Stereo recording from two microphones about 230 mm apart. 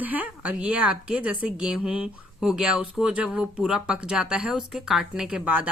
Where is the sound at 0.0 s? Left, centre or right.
Centre.